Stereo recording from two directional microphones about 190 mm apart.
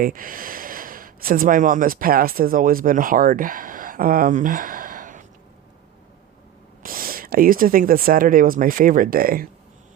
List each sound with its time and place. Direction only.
0.0 s speech: 45° right (ahead or behind)
6.8 s speech: 50° right (ahead or behind)